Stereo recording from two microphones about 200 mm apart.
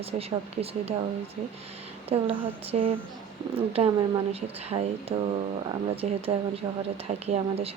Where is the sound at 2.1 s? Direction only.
30° right (ahead or behind).